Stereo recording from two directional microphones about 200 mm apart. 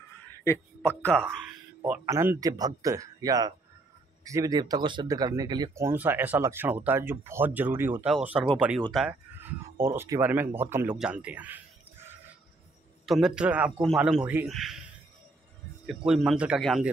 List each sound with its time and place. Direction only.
0.4 s a man's voice: 10° left (ahead or behind)
1.9 s a man's voice: 10° right (ahead or behind)
9.4 s a man's voice: 10° right (ahead or behind)
16.1 s a man's voice: centre (ahead or behind)